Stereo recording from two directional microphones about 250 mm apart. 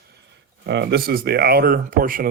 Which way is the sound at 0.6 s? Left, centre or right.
Right.